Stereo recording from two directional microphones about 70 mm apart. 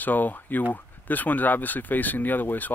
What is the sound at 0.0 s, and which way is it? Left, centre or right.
Speech, left.